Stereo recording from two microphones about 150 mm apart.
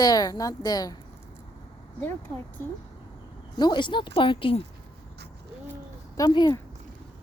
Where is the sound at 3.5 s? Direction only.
30° left (ahead or behind).